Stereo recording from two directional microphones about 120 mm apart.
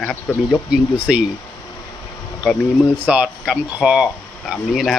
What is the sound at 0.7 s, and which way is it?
Speech, 10° right (ahead or behind).